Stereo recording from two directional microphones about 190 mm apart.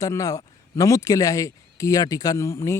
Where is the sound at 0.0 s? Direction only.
15° left (ahead or behind).